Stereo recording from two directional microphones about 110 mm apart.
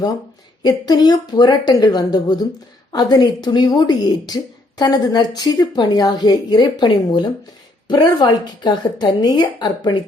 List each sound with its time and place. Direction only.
0.6 s a woman's voice: 40° left (ahead or behind)